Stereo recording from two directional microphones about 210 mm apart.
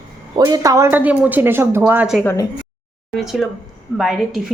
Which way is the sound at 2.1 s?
15° left (ahead or behind).